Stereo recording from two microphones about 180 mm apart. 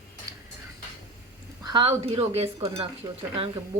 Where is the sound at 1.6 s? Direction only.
25° right (ahead or behind).